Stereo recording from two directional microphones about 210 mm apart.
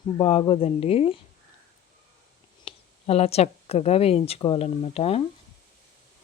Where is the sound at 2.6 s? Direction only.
30° left (ahead or behind).